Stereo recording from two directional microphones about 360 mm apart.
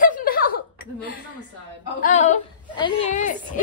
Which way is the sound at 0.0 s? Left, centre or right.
Left.